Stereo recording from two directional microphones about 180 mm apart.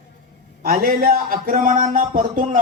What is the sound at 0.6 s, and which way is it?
Speech, 55° right (ahead or behind).